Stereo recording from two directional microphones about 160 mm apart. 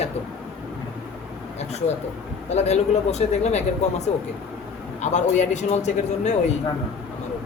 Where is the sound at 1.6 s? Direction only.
45° left (ahead or behind).